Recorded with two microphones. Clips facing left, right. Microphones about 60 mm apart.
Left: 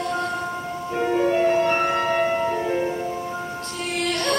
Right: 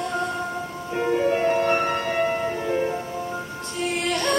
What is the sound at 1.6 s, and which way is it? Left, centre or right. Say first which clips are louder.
Music: left 1 dB; centre.